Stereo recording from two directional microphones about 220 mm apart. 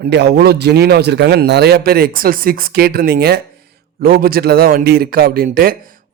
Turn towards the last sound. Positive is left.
turn(degrees=-40)  # may be behind; listen again after turning